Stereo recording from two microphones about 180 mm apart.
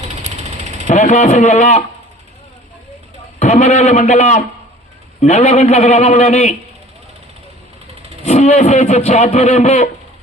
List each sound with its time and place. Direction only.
0.0 s vehicle: 40° right (ahead or behind)
0.9 s a man's voice: 40° left (ahead or behind)
3.4 s a man's voice: 40° left (ahead or behind)
8.2 s a man's voice: 40° left (ahead or behind)